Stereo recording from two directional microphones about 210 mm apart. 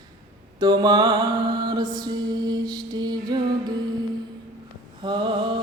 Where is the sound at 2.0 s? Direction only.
20° right (ahead or behind).